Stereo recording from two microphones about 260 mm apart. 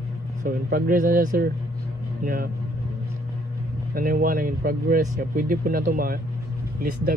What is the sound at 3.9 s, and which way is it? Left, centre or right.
Speech, right.